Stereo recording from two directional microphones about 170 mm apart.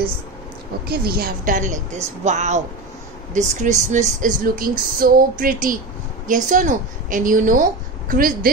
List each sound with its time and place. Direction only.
0.8 s speech: 65° right (ahead or behind)